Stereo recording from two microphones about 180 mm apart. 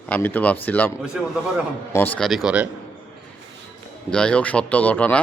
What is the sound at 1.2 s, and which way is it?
Speech, 5° right (ahead or behind).